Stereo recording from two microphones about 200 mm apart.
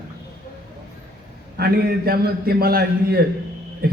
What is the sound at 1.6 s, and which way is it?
A man's voice, 50° right (ahead or behind).